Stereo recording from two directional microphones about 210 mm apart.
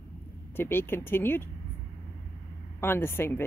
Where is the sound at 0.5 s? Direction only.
10° left (ahead or behind).